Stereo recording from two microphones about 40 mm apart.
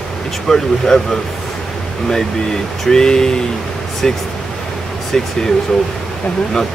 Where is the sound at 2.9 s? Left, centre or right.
Centre.